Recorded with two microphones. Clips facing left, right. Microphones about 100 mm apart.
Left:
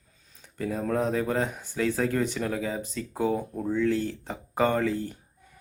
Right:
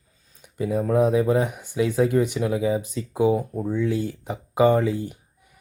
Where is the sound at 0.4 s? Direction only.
15° right (ahead or behind).